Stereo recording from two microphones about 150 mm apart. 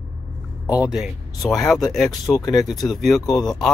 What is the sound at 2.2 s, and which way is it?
Speech, 25° left (ahead or behind).